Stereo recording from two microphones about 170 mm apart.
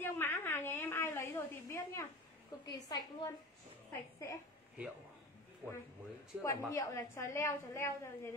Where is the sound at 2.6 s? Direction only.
25° left (ahead or behind).